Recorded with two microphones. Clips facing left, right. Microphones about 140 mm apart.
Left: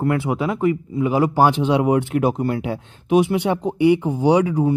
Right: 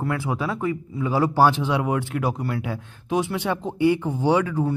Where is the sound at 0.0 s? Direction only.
20° left (ahead or behind).